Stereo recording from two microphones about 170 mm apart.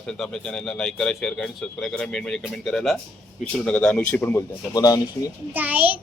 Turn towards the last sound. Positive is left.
turn(degrees=-10)  # may be behind; listen again after turning